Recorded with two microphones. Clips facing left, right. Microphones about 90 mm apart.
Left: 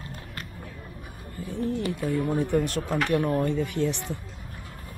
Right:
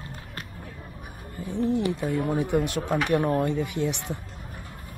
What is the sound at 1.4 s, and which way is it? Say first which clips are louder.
Speech: right 4 dB; 20° right (ahead or behind).